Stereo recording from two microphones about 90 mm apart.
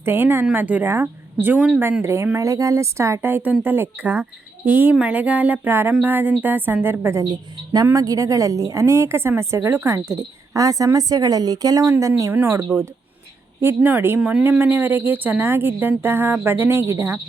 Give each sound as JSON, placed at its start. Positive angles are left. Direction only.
{"t": 0.0, "sound": "a woman's voice", "side_deg": -25}
{"t": 3.2, "sound": "speech", "side_deg": -20}
{"t": 7.3, "sound": "a woman's voice", "side_deg": -45}
{"t": 12.3, "sound": "speech", "side_deg": -25}
{"t": 13.6, "sound": "speech", "side_deg": -25}
{"t": 14.2, "sound": "speech", "side_deg": -10}
{"t": 14.6, "sound": "speech", "side_deg": -20}